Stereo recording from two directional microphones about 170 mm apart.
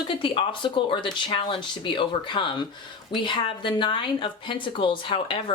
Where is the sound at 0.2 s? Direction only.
30° left (ahead or behind).